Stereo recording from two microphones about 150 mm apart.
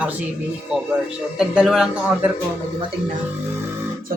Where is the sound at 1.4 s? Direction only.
5° right (ahead or behind).